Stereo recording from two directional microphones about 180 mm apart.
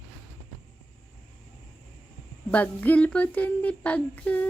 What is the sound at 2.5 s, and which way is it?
Speech, 10° left (ahead or behind).